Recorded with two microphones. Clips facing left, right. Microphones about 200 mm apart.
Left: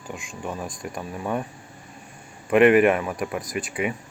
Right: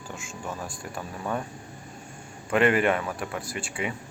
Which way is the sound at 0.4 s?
15° left (ahead or behind).